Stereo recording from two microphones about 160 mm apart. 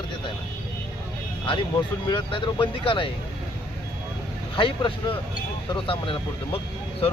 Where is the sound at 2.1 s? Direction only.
30° left (ahead or behind).